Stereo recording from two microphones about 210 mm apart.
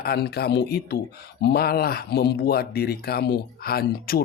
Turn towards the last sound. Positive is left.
turn(degrees=45)  # may be behind; listen again after turning